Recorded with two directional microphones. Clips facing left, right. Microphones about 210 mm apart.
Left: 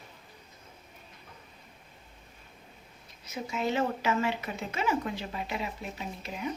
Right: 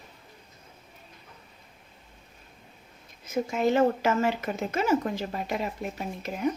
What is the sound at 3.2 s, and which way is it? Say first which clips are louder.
Speech: right 7 dB; 50° right (ahead or behind).